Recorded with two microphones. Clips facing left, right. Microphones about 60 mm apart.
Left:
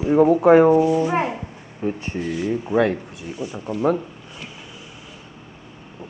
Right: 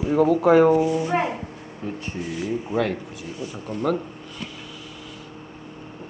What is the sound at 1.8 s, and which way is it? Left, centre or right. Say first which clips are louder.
Speech: left 6 dB; left.